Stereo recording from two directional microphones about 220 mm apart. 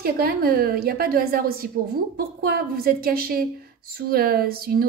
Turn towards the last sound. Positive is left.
turn(degrees=-45)  # may be behind; listen again after turning